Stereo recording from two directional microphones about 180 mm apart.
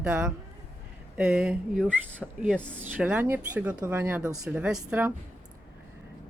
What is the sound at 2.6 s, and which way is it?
Speech, 5° left (ahead or behind).